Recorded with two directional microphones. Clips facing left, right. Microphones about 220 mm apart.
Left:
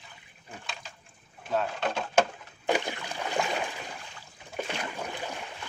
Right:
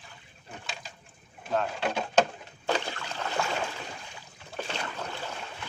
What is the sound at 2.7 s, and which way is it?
Boat, 15° left (ahead or behind).